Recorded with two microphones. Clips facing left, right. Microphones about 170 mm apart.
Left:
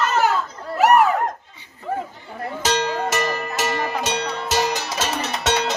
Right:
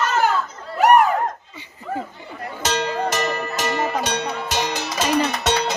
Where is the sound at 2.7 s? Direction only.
5° left (ahead or behind).